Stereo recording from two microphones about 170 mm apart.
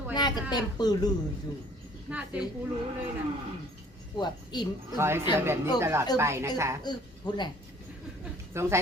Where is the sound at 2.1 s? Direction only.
10° right (ahead or behind).